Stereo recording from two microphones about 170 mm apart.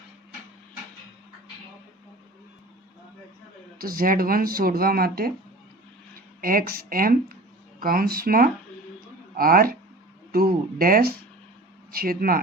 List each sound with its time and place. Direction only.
3.8 s speech: 55° right (ahead or behind)